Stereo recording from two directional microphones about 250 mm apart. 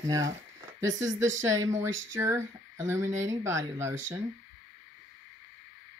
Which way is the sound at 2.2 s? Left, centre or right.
Centre.